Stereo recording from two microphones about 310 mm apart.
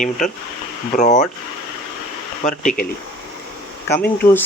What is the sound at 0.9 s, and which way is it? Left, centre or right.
Speech, left.